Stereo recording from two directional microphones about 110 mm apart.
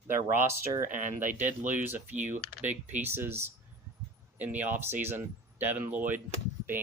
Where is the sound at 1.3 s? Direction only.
15° right (ahead or behind).